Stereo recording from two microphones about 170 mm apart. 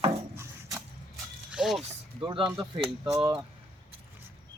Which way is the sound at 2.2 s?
30° right (ahead or behind).